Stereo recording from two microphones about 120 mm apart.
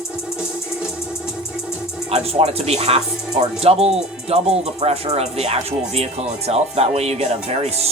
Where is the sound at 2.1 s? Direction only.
55° right (ahead or behind).